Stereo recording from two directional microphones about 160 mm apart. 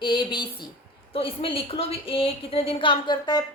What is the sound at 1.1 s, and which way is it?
A woman's voice, 35° left (ahead or behind).